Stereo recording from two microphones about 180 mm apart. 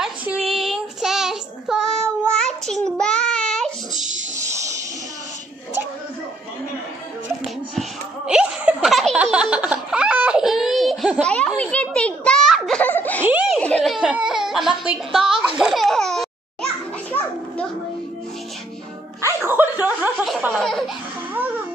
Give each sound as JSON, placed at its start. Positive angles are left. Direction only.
{"t": 0.0, "sound": "child singing", "side_deg": -5}
{"t": 4.4, "sound": "a sound", "side_deg": -15}
{"t": 8.3, "sound": "laughter", "side_deg": -5}
{"t": 11.2, "sound": "a sound", "side_deg": 5}
{"t": 11.6, "sound": "giggle", "side_deg": 5}
{"t": 13.2, "sound": "a sound", "side_deg": -5}
{"t": 13.6, "sound": "baby cry", "side_deg": 5}
{"t": 19.2, "sound": "chuckle", "side_deg": -10}
{"t": 20.5, "sound": "laughter", "side_deg": 0}